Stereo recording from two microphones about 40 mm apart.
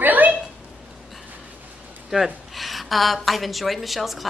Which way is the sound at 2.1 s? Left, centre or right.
Centre.